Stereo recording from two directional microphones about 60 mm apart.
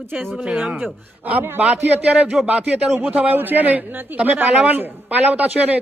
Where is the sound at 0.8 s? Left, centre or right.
Right.